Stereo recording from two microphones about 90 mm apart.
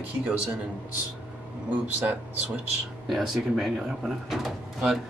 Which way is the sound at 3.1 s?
Centre (ahead or behind).